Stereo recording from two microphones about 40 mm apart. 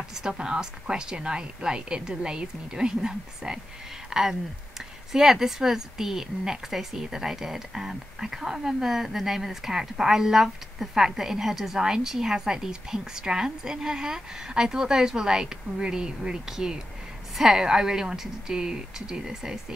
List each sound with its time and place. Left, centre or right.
0.1 s a woman's voice: centre